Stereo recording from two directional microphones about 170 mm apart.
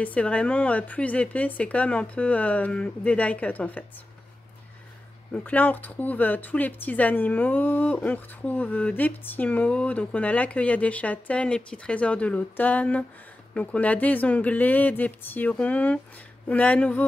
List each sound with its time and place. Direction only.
0.0 s speech: 10° left (ahead or behind)
5.3 s speech: 10° left (ahead or behind)